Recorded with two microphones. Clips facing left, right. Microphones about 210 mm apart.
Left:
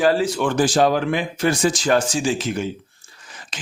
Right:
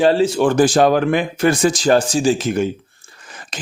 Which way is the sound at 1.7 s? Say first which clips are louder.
Right 4 dB; 35° right (ahead or behind).